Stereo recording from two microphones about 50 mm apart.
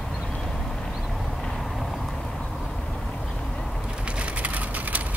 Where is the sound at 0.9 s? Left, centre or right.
Centre.